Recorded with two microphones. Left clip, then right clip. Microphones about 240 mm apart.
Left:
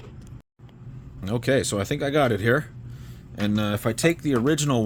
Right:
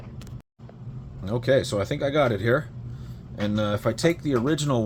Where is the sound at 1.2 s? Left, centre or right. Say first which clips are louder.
Right 1 dB; left.